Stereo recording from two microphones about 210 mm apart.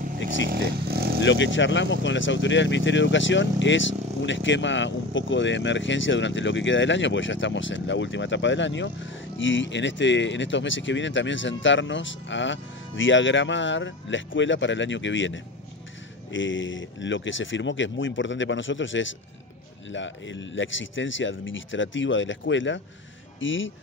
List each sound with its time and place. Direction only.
0.5 s vehicle: 50° right (ahead or behind)
1.2 s speech: 60° left (ahead or behind)